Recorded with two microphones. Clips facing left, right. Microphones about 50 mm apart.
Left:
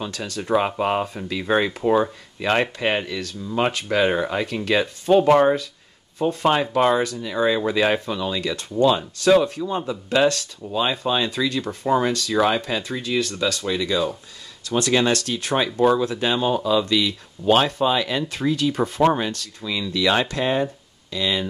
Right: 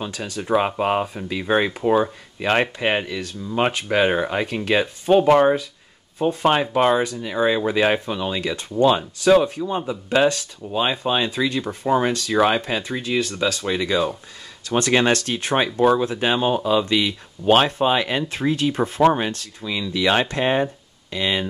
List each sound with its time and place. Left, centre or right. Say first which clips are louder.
0.0 s speech: even; centre
5.2 s speech: right 1 dB; centre
6.1 s speech: right 1 dB; centre
19.6 s speech: even; centre; by 21.5 s right